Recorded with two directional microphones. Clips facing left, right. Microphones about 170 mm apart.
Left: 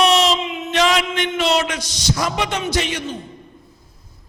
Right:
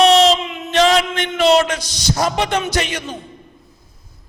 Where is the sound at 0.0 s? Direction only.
35° right (ahead or behind).